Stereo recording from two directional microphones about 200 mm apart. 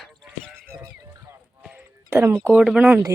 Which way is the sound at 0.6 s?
15° right (ahead or behind).